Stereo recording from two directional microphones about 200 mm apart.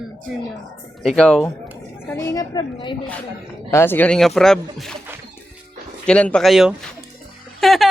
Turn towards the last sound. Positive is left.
turn(degrees=0)  # may be behind; listen again after turning